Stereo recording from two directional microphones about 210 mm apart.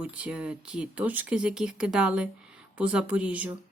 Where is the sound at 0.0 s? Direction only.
5° right (ahead or behind).